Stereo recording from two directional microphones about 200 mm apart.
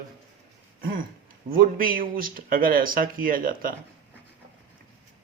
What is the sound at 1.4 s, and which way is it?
Speech, 45° right (ahead or behind).